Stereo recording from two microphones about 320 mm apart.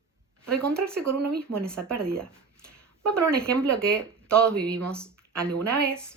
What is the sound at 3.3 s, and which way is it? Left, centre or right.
Speech, centre.